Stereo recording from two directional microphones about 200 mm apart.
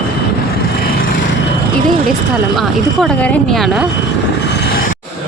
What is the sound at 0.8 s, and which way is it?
Vehicle, 50° left (ahead or behind).